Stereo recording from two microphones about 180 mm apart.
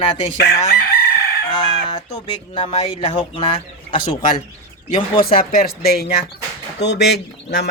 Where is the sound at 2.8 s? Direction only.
30° left (ahead or behind).